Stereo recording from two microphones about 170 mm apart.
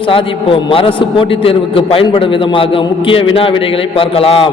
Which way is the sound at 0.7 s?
30° left (ahead or behind).